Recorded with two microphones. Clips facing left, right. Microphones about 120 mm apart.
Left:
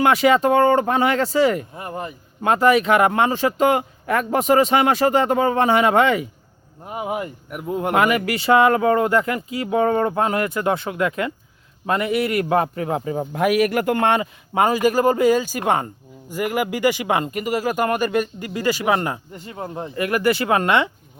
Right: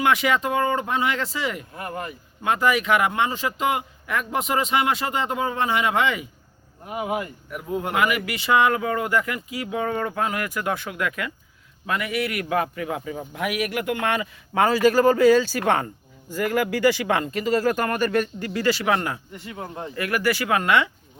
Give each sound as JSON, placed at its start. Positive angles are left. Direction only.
{"t": 0.0, "sound": "speech", "side_deg": 35}
{"t": 1.7, "sound": "speech", "side_deg": 20}
{"t": 2.4, "sound": "speech", "side_deg": 35}
{"t": 6.8, "sound": "speech", "side_deg": 30}
{"t": 7.9, "sound": "speech", "side_deg": 40}
{"t": 14.5, "sound": "speech", "side_deg": 15}
{"t": 19.3, "sound": "speech", "side_deg": 40}
{"t": 20.0, "sound": "speech", "side_deg": 25}